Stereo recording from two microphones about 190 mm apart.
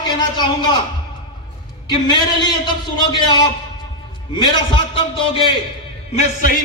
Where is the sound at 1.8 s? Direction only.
25° left (ahead or behind).